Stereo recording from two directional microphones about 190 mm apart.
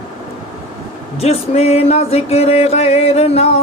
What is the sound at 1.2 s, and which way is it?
Music, 35° left (ahead or behind).